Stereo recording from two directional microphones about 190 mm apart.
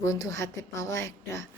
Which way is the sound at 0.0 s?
15° left (ahead or behind).